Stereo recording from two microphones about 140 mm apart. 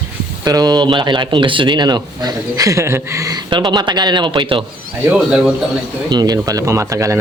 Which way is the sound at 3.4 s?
35° right (ahead or behind).